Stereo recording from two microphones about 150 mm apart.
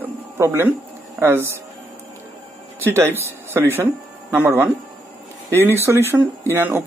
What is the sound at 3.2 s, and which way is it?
Speech, 15° right (ahead or behind).